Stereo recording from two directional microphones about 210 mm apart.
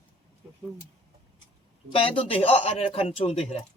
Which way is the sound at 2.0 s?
25° left (ahead or behind).